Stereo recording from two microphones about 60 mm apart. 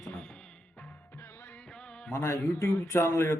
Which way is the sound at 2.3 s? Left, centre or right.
Left.